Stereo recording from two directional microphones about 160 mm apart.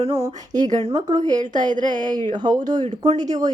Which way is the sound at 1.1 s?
25° right (ahead or behind).